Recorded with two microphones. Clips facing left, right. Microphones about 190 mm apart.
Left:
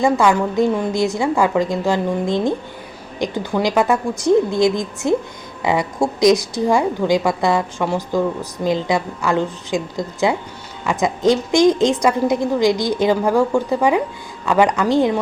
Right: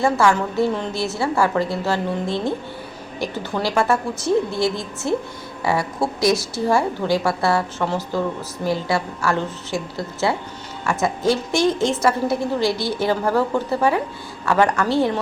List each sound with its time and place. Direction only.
0.0 s a woman's voice: 15° left (ahead or behind)